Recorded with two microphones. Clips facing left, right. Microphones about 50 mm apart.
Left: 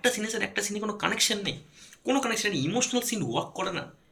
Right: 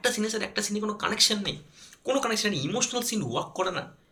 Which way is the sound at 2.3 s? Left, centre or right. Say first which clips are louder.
Even; centre.